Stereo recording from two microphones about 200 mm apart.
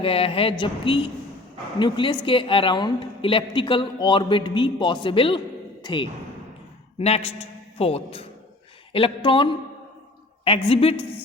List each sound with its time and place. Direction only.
0.0 s a woman's voice: 25° left (ahead or behind)